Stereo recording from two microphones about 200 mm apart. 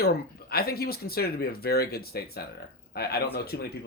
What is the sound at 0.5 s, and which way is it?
Speech, 50° left (ahead or behind).